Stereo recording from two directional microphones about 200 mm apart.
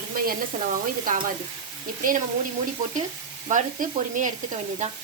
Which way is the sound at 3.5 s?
40° right (ahead or behind).